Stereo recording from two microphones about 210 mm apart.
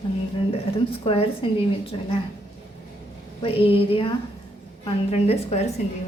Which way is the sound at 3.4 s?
25° left (ahead or behind).